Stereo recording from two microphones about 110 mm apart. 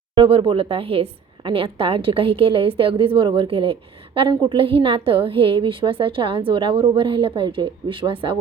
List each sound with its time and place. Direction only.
0.1 s a woman's voice: 50° right (ahead or behind)